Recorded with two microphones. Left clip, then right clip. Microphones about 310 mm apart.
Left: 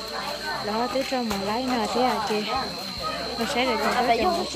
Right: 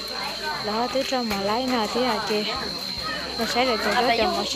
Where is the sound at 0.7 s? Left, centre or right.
Centre.